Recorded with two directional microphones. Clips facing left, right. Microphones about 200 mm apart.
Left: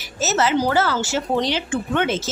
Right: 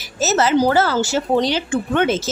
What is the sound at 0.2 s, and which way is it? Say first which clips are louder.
Speech: right 4 dB; 40° right (ahead or behind).